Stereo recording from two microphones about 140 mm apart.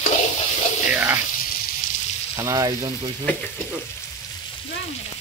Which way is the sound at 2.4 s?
25° right (ahead or behind).